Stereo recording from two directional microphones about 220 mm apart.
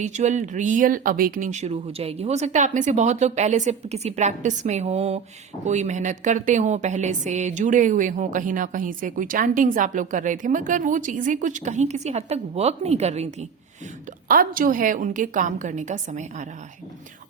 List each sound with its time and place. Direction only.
0.0 s a woman's voice: 35° right (ahead or behind)
14.3 s a woman's voice: 40° right (ahead or behind)